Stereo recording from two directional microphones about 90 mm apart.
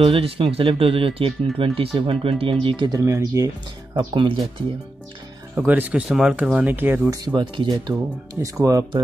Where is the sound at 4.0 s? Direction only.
60° right (ahead or behind).